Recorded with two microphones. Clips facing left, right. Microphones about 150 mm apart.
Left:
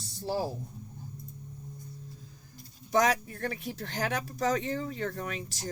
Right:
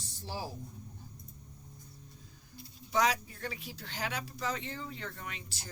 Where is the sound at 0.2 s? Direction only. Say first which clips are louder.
Left 10 dB; 35° left (ahead or behind).